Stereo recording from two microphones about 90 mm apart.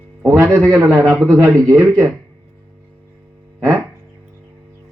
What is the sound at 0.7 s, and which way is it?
A man's voice, 30° right (ahead or behind).